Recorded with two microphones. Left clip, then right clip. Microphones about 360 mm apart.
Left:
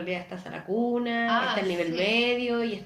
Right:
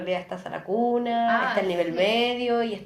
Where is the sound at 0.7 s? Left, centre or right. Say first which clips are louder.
Right 3 dB; right.